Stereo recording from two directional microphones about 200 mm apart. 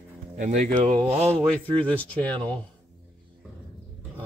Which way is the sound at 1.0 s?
30° right (ahead or behind).